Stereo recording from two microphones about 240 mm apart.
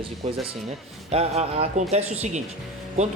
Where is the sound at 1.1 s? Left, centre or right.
Right.